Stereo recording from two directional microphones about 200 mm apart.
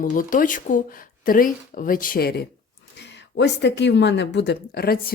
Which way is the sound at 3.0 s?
60° left (ahead or behind).